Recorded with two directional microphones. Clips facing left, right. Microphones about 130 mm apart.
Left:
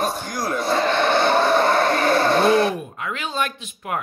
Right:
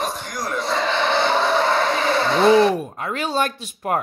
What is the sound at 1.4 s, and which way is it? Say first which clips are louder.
Music: left 2 dB; 50° left (ahead or behind).